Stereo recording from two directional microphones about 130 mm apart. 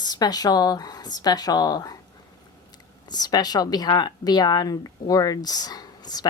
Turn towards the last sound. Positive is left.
turn(degrees=30)  # may be behind; listen again after turning